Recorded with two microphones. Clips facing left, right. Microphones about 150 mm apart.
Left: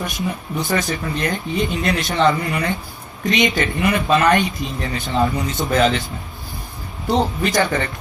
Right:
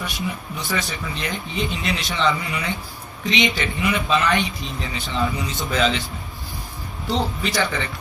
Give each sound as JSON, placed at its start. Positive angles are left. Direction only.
{"t": 0.0, "sound": "speech", "side_deg": 45}
{"t": 7.1, "sound": "speech", "side_deg": 45}